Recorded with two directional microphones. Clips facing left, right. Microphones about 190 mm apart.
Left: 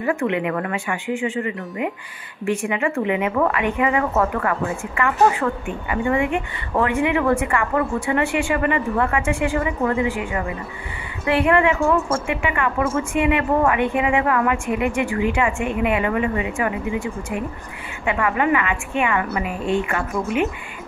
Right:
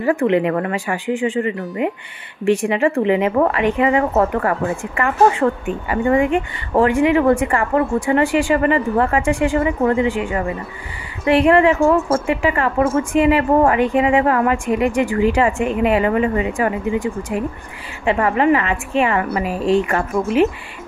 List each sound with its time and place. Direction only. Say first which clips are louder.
0.0 s a woman's voice: right 5 dB; 35° right (ahead or behind)